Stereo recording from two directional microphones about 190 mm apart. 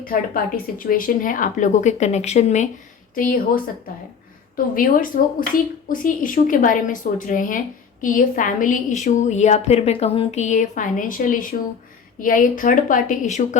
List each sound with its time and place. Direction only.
0.0 s a woman's voice: 50° left (ahead or behind)